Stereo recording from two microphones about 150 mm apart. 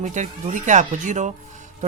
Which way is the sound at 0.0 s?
55° right (ahead or behind).